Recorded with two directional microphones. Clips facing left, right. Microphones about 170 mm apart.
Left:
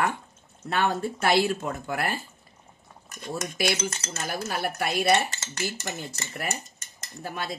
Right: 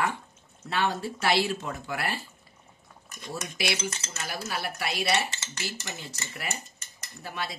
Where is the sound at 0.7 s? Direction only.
55° left (ahead or behind).